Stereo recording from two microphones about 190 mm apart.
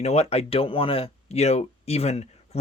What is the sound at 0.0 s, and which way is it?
Speech, 35° left (ahead or behind).